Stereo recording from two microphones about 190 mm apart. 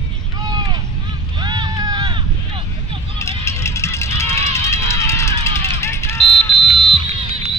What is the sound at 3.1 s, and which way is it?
Vehicle, 15° left (ahead or behind).